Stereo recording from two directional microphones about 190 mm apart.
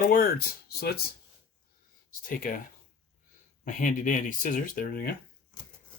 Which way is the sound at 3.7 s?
40° left (ahead or behind).